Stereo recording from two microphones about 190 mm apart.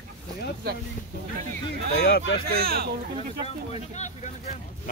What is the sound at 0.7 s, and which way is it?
Speech, 55° right (ahead or behind).